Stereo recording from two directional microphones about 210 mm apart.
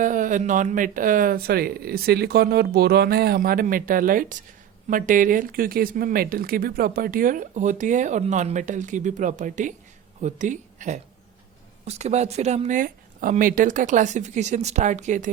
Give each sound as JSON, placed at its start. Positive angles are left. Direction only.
{"t": 0.0, "sound": "speech", "side_deg": -40}